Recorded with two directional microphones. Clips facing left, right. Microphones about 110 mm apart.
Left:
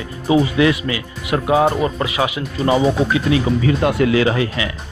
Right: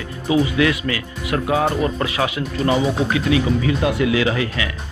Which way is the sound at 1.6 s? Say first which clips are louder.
Left 2 dB; 5° left (ahead or behind).